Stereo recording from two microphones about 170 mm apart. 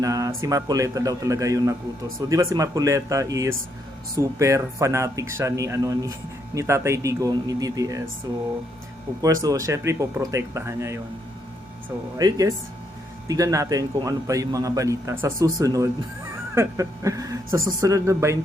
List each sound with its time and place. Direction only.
0.0 s a man's voice: 20° right (ahead or behind)
9.2 s a man's voice: 20° right (ahead or behind)
12.1 s a man's voice: 20° right (ahead or behind)